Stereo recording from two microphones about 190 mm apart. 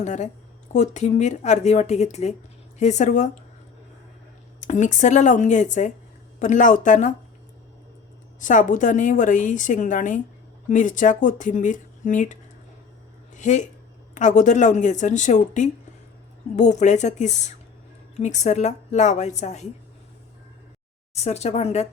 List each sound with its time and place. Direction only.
0.0 s a woman's voice: 40° left (ahead or behind)
4.6 s a woman's voice: 40° left (ahead or behind)
8.4 s a woman's voice: 40° left (ahead or behind)
21.2 s a woman's voice: 35° left (ahead or behind)